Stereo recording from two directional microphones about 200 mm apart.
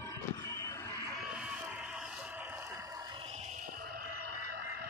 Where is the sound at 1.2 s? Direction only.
5° right (ahead or behind).